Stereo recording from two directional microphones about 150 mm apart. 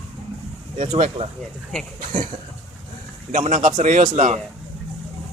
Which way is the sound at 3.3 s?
55° right (ahead or behind).